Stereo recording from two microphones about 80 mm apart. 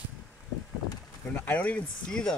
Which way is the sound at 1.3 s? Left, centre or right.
Left.